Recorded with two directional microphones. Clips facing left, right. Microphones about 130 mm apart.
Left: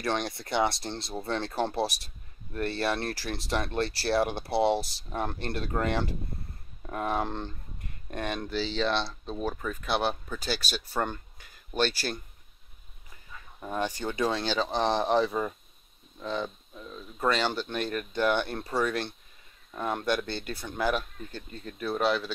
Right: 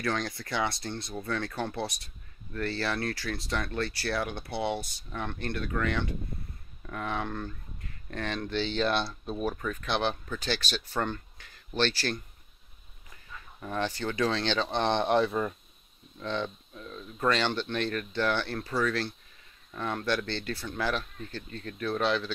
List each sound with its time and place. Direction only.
0.0 s speech: 25° left (ahead or behind)
8.1 s speech: 15° left (ahead or behind); by 9.6 s centre (ahead or behind)
9.6 s speech: 10° left (ahead or behind)
13.6 s speech: 15° left (ahead or behind)
18.6 s speech: 25° left (ahead or behind); by 22.3 s 10° left (ahead or behind)